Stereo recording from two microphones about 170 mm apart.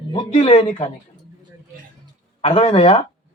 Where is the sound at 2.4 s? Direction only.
35° left (ahead or behind).